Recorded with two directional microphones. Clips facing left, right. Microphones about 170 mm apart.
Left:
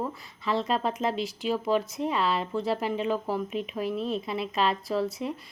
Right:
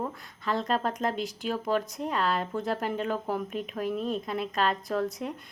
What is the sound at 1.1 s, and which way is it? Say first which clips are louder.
Speech: left 2 dB; 45° right (ahead or behind).